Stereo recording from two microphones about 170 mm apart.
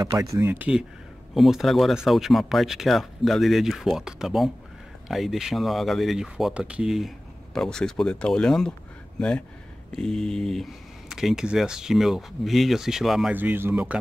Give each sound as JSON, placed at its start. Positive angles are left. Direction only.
{"t": 0.0, "sound": "speech", "side_deg": -20}